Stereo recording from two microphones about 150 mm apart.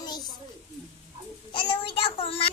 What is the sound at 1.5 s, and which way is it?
Speech, 40° left (ahead or behind).